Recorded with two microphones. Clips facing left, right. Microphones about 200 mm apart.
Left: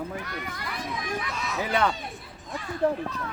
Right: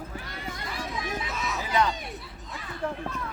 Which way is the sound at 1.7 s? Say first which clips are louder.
Even; 60° left (ahead or behind).